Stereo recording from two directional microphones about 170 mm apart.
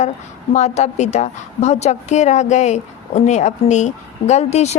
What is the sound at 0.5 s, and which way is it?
A woman's voice, 40° left (ahead or behind).